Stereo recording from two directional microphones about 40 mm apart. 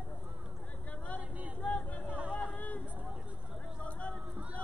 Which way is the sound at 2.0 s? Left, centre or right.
Right.